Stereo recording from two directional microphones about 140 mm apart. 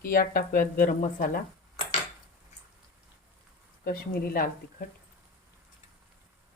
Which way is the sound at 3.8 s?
90° left.